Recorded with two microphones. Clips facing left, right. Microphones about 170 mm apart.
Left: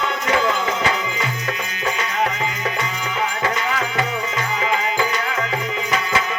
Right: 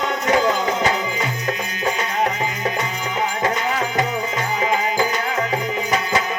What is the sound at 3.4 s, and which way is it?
Music, 40° right (ahead or behind).